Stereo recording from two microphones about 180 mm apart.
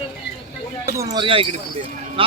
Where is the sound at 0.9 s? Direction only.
20° right (ahead or behind).